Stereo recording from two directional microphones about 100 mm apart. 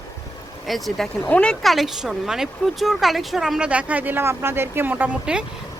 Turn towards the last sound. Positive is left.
turn(degrees=-10)  # may be behind; listen again after turning